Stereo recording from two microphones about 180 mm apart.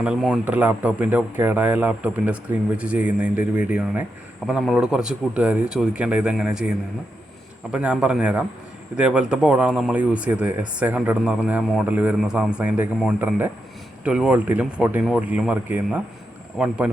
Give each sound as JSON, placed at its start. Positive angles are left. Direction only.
{"t": 0.0, "sound": "speech", "side_deg": -5}